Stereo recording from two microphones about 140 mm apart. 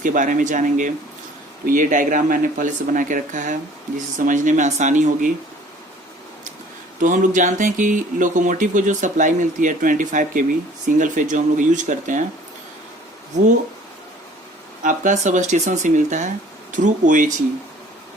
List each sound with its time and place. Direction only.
0.0 s speech: 70° right (ahead or behind)
7.0 s speech: 65° right (ahead or behind)
14.8 s speech: 60° right (ahead or behind)